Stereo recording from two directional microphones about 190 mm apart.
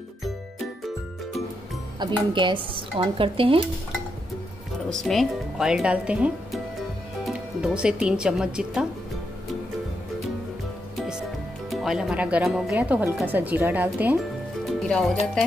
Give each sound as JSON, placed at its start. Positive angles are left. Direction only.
{"t": 2.0, "sound": "speech", "side_deg": -25}
{"t": 4.8, "sound": "speech", "side_deg": 0}
{"t": 7.6, "sound": "a woman's voice", "side_deg": -5}
{"t": 11.0, "sound": "music", "side_deg": -5}
{"t": 11.7, "sound": "speech", "side_deg": 0}
{"t": 14.7, "sound": "speech", "side_deg": 0}